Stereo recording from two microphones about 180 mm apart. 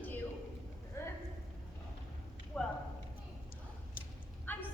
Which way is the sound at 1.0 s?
15° left (ahead or behind).